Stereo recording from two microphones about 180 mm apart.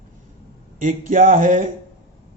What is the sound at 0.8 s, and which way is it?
Speech, 50° right (ahead or behind).